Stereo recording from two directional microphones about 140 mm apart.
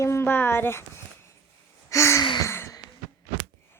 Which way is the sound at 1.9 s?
20° left (ahead or behind).